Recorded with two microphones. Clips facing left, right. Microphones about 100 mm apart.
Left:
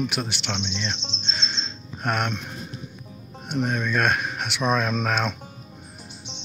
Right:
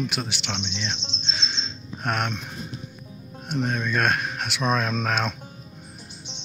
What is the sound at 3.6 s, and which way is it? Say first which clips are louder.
Speech: left 1 dB; centre (ahead or behind).